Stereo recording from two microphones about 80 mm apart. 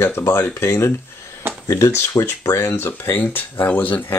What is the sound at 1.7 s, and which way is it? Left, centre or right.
Speech, left.